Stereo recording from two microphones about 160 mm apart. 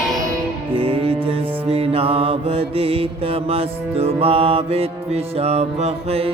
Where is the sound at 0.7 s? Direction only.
35° right (ahead or behind).